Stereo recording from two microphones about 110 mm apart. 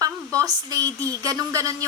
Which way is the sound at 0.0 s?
30° right (ahead or behind).